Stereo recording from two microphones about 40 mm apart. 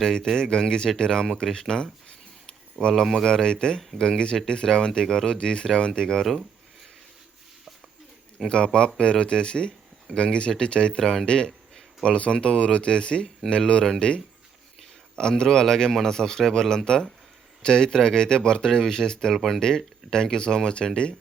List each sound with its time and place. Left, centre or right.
0.0 s a man's voice: centre
1.5 s a sound: centre
2.9 s speech: centre
3.2 s a man's voice: centre
8.4 s a man's voice: centre
19.3 s speech: centre
19.6 s a man's voice: centre